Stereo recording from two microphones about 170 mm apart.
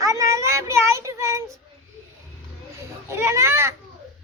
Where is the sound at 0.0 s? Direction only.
15° right (ahead or behind).